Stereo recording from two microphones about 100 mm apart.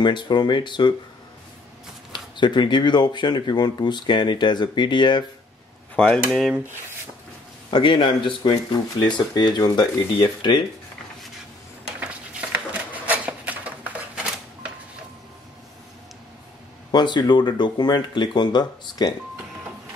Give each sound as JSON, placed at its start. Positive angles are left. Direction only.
{"t": 0.0, "sound": "speech", "side_deg": 50}
{"t": 2.3, "sound": "speech", "side_deg": 50}
{"t": 5.9, "sound": "speech", "side_deg": 10}
{"t": 7.7, "sound": "speech", "side_deg": 55}
{"t": 9.0, "sound": "speech", "side_deg": 45}
{"t": 12.0, "sound": "a sound", "side_deg": -15}
{"t": 16.9, "sound": "speech", "side_deg": 50}